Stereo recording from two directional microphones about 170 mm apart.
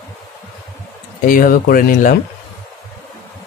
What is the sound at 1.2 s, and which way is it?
Speech, 55° left (ahead or behind).